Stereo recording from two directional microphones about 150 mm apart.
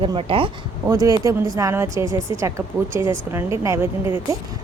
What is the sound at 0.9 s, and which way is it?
A woman's voice, 25° right (ahead or behind).